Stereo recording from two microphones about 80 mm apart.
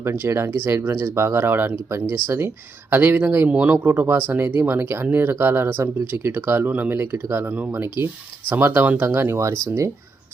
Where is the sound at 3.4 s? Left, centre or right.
Centre.